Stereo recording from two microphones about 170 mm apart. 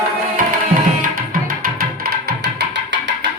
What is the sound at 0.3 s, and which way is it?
Music, 55° right (ahead or behind).